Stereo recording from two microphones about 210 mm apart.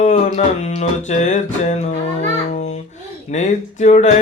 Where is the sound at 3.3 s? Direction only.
35° left (ahead or behind).